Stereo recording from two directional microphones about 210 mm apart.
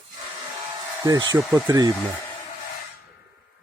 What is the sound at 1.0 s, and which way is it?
Speech, 20° right (ahead or behind).